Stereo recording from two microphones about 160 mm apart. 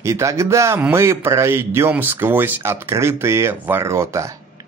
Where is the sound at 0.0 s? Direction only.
20° right (ahead or behind).